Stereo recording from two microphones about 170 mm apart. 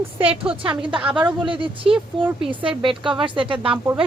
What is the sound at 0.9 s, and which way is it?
Speech, 10° right (ahead or behind).